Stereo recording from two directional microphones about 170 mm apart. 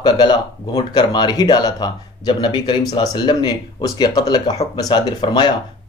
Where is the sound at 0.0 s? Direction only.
25° left (ahead or behind).